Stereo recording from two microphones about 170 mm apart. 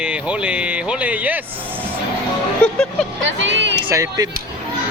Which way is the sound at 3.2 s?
90° right.